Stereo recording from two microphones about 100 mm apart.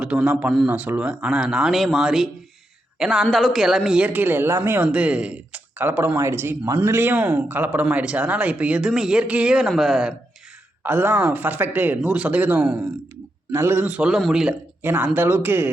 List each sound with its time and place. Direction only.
0.0 s speech: 10° right (ahead or behind)
4.0 s speech: 15° right (ahead or behind)
10.8 s speech: 20° right (ahead or behind)
13.5 s speech: 25° right (ahead or behind); by 14.5 s 5° right (ahead or behind)
14.8 s speech: 20° right (ahead or behind)